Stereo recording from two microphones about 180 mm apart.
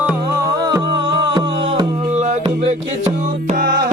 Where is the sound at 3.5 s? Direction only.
50° right (ahead or behind).